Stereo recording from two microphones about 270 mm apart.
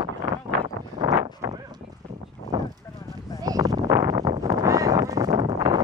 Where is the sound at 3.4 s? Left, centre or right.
Centre.